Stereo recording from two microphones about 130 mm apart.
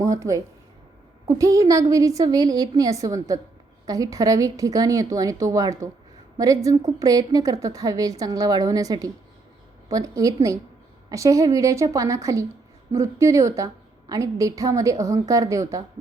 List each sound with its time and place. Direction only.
0.0 s a woman's voice: 25° right (ahead or behind)